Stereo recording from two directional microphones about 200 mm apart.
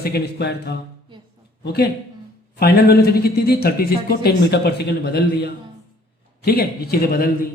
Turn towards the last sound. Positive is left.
turn(degrees=50)  # may be behind; listen again after turning